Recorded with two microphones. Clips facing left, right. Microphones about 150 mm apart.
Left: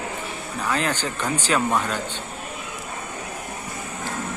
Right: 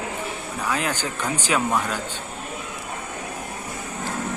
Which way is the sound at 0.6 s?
10° right (ahead or behind).